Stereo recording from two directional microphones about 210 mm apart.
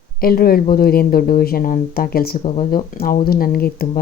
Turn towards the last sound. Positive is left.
turn(degrees=45)  # may be behind; listen again after turning